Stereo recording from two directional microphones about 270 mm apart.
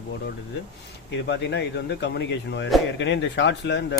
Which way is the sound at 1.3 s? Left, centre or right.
Left.